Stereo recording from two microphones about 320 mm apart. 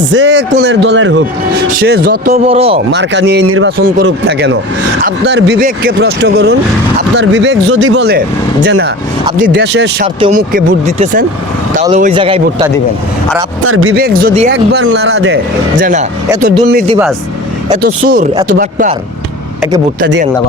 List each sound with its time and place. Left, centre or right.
0.1 s speech: right
2.5 s speech: centre
2.9 s speech: right
10.2 s speech: centre
13.7 s speech: right
14.0 s speech: right
15.8 s speech: right
20.0 s speech: right